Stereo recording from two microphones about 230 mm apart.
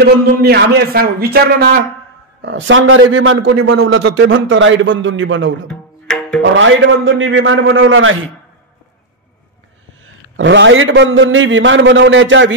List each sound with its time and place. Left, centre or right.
0.0 s a man's voice: right
2.4 s a man's voice: right
5.7 s music: centre
6.5 s a man's voice: right
10.3 s a man's voice: right